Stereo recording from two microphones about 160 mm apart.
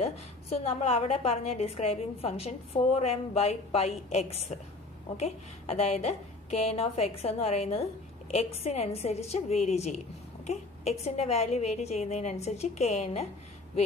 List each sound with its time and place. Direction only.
0.0 s a woman's voice: 40° left (ahead or behind)